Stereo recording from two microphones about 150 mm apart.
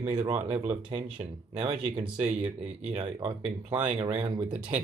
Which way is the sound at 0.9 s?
40° right (ahead or behind).